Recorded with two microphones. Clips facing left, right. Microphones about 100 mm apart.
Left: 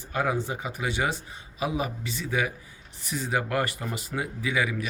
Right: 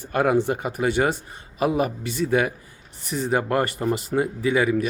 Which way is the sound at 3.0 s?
40° right (ahead or behind).